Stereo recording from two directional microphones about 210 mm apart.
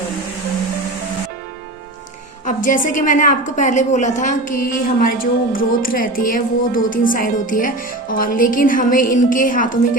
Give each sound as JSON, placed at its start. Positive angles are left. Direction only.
{"t": 2.5, "sound": "a woman's voice", "side_deg": 40}